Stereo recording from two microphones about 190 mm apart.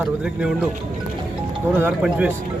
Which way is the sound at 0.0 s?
5° right (ahead or behind).